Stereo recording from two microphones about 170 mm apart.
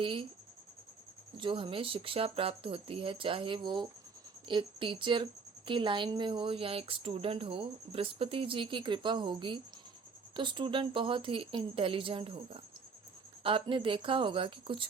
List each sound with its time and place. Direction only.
0.0 s speech: 30° right (ahead or behind)
1.4 s a woman's voice: 30° right (ahead or behind)